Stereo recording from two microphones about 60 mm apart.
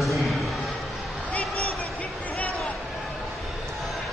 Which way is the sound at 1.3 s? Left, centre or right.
Left.